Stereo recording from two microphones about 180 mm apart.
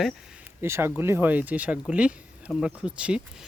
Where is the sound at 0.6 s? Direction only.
15° right (ahead or behind).